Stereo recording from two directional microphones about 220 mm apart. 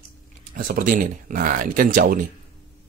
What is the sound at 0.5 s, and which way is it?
Speech, 40° right (ahead or behind).